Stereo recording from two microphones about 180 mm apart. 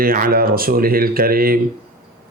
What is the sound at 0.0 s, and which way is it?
A man's voice, 55° right (ahead or behind).